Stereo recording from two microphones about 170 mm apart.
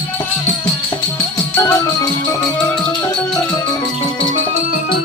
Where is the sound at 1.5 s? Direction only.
15° left (ahead or behind).